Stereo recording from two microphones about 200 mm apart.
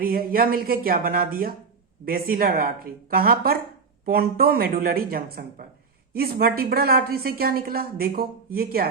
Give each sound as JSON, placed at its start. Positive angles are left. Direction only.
{"t": 0.0, "sound": "a woman's voice", "side_deg": -50}